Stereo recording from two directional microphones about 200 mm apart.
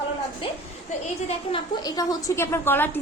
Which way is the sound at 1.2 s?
25° left (ahead or behind).